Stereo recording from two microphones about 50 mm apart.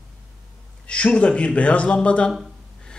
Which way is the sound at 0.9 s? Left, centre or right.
Left.